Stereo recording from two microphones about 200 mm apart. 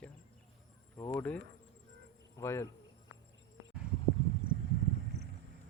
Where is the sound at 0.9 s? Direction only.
20° left (ahead or behind).